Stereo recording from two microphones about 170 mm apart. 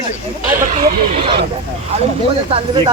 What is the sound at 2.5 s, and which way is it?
Speech, 30° right (ahead or behind).